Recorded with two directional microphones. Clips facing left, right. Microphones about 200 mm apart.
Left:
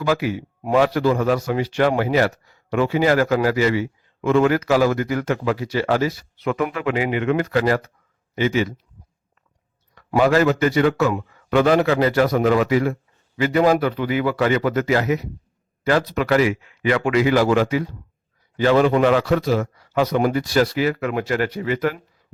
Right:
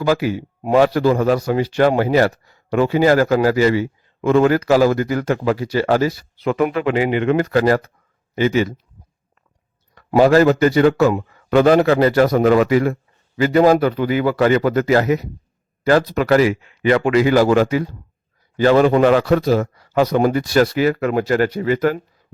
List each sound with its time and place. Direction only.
0.0 s a man's voice: 35° right (ahead or behind)
10.2 s a man's voice: 35° right (ahead or behind)
12.4 s a man's voice: 55° right (ahead or behind)